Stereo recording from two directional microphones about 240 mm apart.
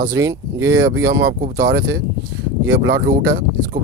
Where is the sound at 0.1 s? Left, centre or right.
Centre.